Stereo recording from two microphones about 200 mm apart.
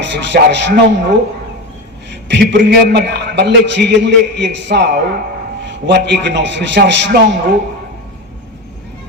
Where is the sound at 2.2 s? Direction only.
60° right (ahead or behind).